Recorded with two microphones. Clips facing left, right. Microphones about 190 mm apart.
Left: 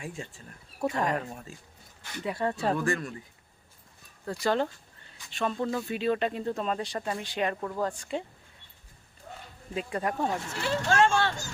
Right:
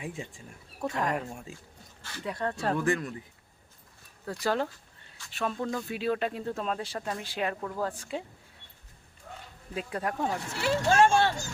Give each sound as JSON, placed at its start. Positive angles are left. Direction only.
{"t": 0.0, "sound": "speech", "side_deg": -15}
{"t": 0.8, "sound": "speech", "side_deg": 5}
{"t": 2.0, "sound": "speech", "side_deg": 20}
{"t": 2.2, "sound": "speech", "side_deg": 5}
{"t": 2.8, "sound": "speech", "side_deg": -20}
{"t": 4.3, "sound": "speech", "side_deg": -5}
{"t": 9.7, "sound": "speech", "side_deg": 0}
{"t": 10.9, "sound": "speech", "side_deg": -20}